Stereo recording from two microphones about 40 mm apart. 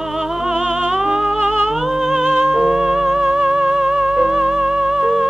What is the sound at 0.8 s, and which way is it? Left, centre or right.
Music, centre.